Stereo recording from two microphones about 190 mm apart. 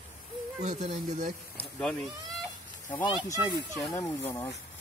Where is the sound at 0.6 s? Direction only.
40° right (ahead or behind).